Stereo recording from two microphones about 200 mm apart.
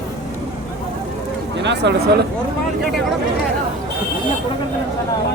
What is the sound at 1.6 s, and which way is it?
Speech, 60° right (ahead or behind).